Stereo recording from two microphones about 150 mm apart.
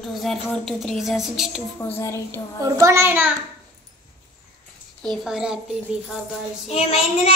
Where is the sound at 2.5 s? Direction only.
20° right (ahead or behind).